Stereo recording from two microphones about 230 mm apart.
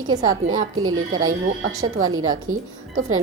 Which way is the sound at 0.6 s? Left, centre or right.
Right.